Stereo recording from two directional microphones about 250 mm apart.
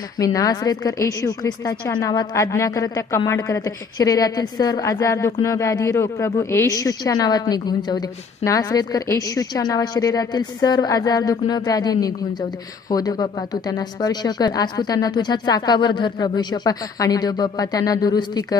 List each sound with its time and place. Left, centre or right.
0.2 s a woman's voice: centre